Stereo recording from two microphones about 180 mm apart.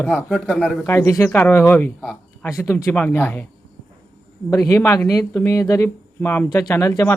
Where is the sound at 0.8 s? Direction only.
15° left (ahead or behind).